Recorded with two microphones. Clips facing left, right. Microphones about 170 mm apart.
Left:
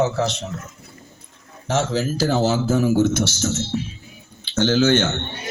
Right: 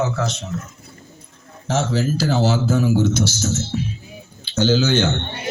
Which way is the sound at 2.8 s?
50° left (ahead or behind).